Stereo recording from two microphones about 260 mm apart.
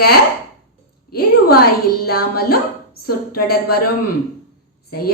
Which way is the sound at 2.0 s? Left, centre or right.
Left.